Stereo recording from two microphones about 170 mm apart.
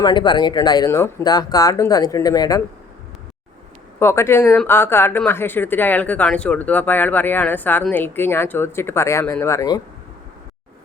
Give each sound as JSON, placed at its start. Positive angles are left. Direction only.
{"t": 0.0, "sound": "speech", "side_deg": 25}
{"t": 4.0, "sound": "speech", "side_deg": 15}